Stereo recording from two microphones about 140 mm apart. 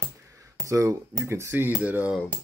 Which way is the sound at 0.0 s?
20° right (ahead or behind).